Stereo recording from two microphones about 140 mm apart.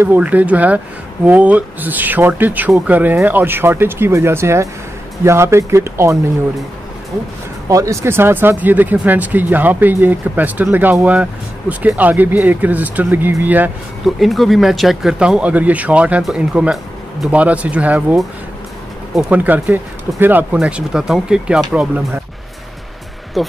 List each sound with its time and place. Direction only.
0.0 s speech: 10° right (ahead or behind)
7.6 s speech: 20° right (ahead or behind)
14.0 s speech: centre (ahead or behind)
23.4 s speech: centre (ahead or behind)